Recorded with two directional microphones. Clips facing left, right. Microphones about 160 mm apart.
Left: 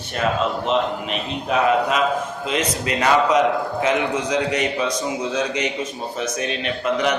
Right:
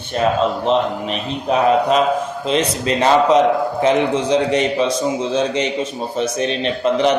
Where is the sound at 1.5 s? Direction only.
30° right (ahead or behind).